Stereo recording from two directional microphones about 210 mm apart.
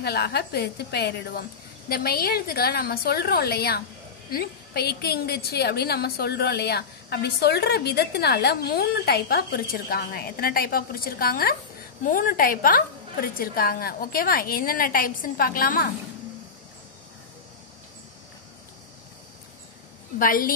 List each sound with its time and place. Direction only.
0.0 s a woman's voice: 50° left (ahead or behind)
20.2 s a woman's voice: 40° left (ahead or behind)